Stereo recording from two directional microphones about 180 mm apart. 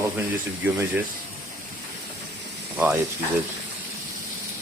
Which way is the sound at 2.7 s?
10° right (ahead or behind).